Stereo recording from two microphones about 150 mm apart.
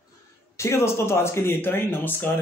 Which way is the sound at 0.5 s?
20° left (ahead or behind).